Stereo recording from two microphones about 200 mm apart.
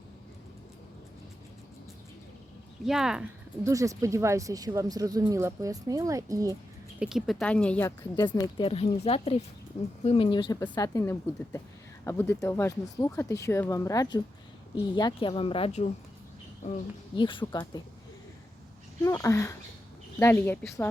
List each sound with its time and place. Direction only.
2.8 s speech: centre (ahead or behind)
3.6 s speech: 15° right (ahead or behind)
7.0 s speech: centre (ahead or behind); by 16.8 s 35° left (ahead or behind)
17.2 s speech: 25° left (ahead or behind)
19.0 s speech: 15° left (ahead or behind)